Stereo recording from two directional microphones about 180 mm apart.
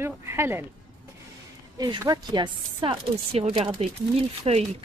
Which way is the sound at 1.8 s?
25° right (ahead or behind).